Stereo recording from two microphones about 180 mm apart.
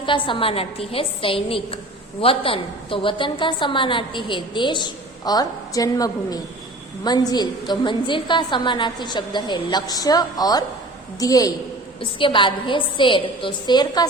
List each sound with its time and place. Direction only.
0.0 s a woman's voice: 25° left (ahead or behind)